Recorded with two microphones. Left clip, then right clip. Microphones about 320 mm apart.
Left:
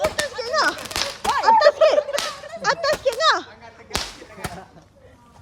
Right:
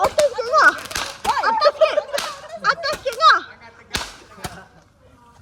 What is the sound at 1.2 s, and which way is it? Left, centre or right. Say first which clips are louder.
Whip: right 2 dB; centre.